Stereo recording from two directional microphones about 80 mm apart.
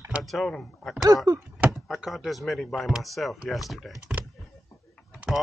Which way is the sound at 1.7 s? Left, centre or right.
Centre.